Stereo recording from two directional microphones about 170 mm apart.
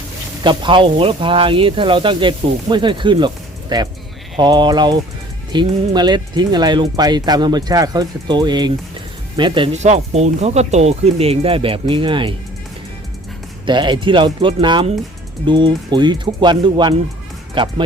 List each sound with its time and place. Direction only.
0.4 s speech: 30° right (ahead or behind)
9.7 s speech: 40° right (ahead or behind)
13.7 s speech: 25° right (ahead or behind)